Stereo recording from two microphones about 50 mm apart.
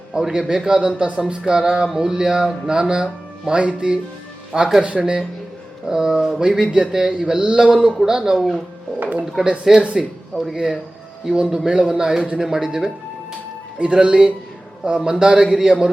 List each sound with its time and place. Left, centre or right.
0.1 s a man's voice: centre
5.8 s a sound: centre
6.4 s speech: centre
8.4 s speech: centre
9.0 s speech: right
9.4 s a man's voice: centre
10.3 s speech: centre
11.5 s a man's voice: centre